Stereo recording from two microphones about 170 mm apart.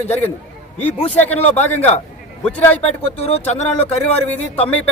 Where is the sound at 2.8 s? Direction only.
35° left (ahead or behind).